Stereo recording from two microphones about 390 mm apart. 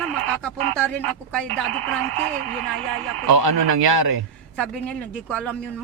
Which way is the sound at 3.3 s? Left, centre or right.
Right.